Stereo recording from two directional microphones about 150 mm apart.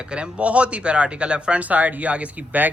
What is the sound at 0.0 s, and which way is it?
Speech, 5° right (ahead or behind).